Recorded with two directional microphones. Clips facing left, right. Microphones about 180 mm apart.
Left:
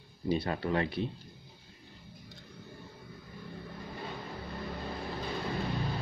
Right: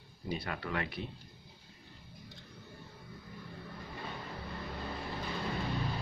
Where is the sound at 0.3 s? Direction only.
30° left (ahead or behind).